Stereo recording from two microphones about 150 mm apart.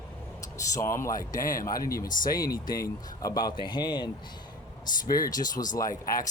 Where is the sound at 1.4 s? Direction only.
70° left (ahead or behind).